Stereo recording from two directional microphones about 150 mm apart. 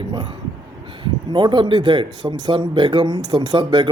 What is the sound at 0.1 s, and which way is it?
Speech, 30° right (ahead or behind).